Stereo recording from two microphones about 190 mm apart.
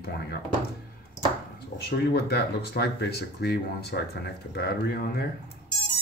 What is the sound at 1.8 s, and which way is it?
Speech, 60° left (ahead or behind).